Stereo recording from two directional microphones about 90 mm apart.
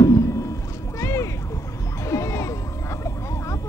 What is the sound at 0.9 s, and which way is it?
Music, 35° left (ahead or behind).